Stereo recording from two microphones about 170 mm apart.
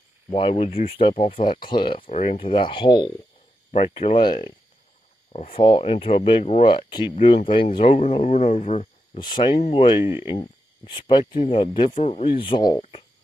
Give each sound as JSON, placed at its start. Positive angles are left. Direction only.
{"t": 0.3, "sound": "speech", "side_deg": 35}
{"t": 2.0, "sound": "speech", "side_deg": 40}
{"t": 9.2, "sound": "speech", "side_deg": 25}